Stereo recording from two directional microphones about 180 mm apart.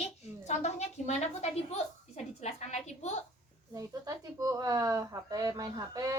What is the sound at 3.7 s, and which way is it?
Speech, 20° right (ahead or behind).